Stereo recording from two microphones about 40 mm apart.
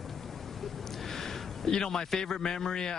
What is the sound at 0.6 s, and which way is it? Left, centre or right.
A man's voice, centre.